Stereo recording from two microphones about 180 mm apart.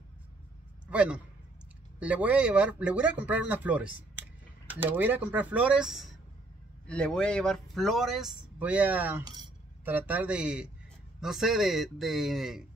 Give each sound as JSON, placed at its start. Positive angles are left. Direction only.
{"t": 0.8, "sound": "a man's voice", "side_deg": -5}
{"t": 9.2, "sound": "speech", "side_deg": -25}
{"t": 9.8, "sound": "speech", "side_deg": -10}